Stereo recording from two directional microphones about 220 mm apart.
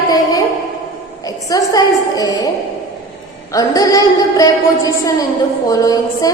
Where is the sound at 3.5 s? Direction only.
15° left (ahead or behind).